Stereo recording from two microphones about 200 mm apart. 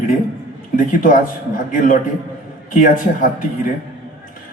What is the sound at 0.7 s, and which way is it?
Speech, 40° left (ahead or behind).